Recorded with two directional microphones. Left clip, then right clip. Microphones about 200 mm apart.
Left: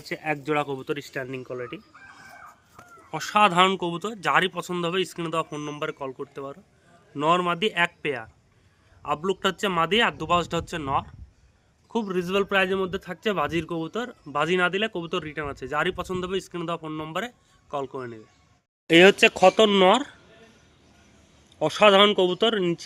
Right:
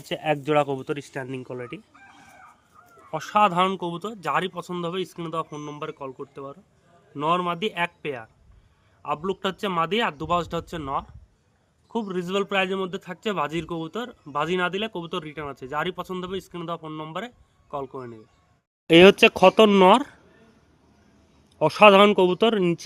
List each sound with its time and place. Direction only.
0.0 s speech: 40° right (ahead or behind)
3.1 s a man's voice: 15° right (ahead or behind)
18.9 s speech: 45° right (ahead or behind)
21.6 s speech: 45° right (ahead or behind)